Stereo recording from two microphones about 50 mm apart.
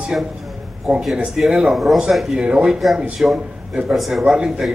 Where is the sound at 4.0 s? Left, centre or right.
Centre.